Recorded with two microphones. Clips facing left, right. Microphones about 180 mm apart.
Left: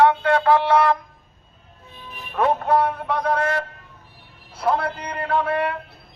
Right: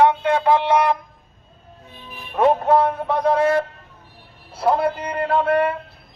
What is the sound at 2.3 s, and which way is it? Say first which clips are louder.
Music: right 3 dB; 25° right (ahead or behind).